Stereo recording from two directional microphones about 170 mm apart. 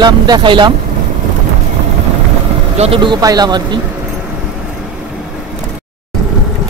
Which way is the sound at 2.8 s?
30° right (ahead or behind).